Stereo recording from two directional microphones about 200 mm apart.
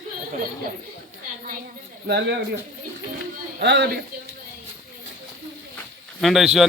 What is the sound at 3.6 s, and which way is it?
Speech, 55° right (ahead or behind).